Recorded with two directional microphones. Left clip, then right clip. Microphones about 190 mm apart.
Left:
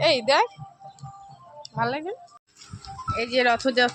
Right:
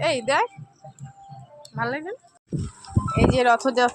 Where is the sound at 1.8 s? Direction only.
5° left (ahead or behind).